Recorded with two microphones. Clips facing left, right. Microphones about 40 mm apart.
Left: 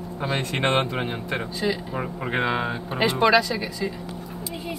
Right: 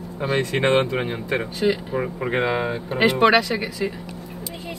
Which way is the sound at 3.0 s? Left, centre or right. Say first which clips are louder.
Right 2 dB; right.